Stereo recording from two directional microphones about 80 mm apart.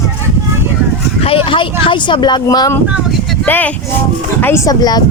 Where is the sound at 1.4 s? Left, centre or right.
Left.